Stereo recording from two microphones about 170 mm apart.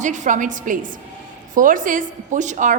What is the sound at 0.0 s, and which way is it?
A woman's voice, 45° right (ahead or behind).